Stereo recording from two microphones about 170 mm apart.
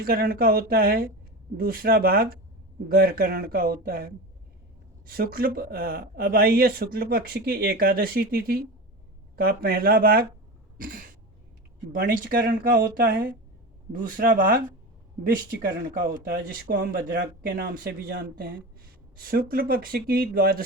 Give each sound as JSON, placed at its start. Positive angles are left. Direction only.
{"t": 0.0, "sound": "speech", "side_deg": -60}
{"t": 10.8, "sound": "a sound", "side_deg": -55}
{"t": 11.9, "sound": "speech", "side_deg": -55}